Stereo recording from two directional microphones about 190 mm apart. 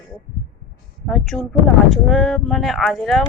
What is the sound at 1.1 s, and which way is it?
A woman's voice, centre (ahead or behind).